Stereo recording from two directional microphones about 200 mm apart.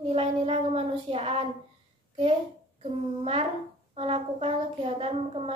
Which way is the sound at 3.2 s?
30° right (ahead or behind).